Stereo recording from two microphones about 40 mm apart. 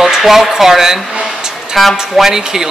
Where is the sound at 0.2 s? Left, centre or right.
Centre.